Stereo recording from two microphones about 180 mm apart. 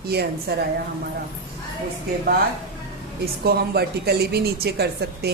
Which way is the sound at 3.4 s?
60° right (ahead or behind).